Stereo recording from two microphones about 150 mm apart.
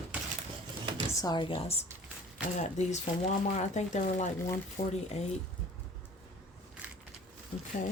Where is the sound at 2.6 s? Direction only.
50° left (ahead or behind).